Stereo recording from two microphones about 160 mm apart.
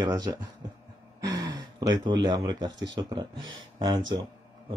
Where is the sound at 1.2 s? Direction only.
25° right (ahead or behind).